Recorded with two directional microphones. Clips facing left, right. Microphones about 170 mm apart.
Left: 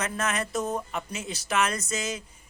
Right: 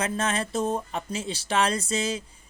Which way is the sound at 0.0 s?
30° right (ahead or behind).